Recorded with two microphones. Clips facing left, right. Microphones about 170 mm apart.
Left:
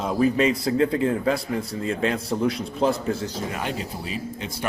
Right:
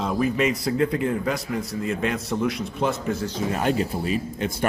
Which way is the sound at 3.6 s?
50° right (ahead or behind).